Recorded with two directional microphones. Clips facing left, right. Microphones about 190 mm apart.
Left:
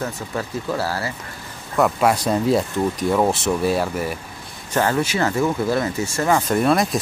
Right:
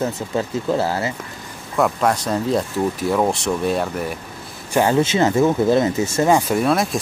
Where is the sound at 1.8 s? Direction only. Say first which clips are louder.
Left 1 dB; 5° left (ahead or behind).